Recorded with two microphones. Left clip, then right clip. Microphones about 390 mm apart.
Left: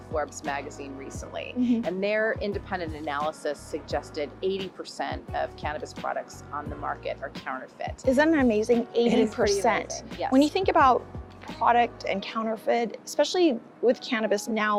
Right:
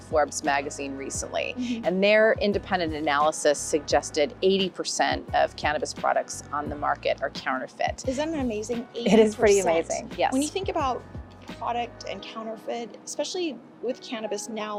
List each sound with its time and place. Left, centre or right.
0.1 s a woman's voice: right
8.0 s a woman's voice: left
9.0 s speech: right
9.4 s a woman's voice: left